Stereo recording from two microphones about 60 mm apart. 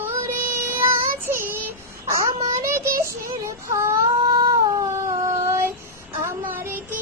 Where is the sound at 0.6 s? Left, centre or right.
Right.